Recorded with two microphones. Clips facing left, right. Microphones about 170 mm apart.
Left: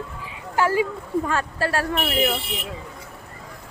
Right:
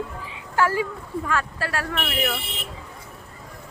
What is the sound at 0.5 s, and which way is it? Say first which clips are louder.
Speech: left 2 dB; 15° left (ahead or behind).